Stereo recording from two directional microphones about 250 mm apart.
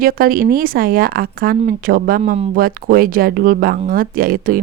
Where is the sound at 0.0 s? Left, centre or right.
Right.